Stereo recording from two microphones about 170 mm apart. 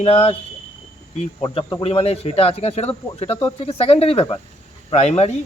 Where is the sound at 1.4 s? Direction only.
30° left (ahead or behind).